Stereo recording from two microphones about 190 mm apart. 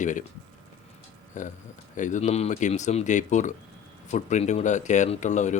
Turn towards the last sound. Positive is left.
turn(degrees=40)  # may be behind; listen again after turning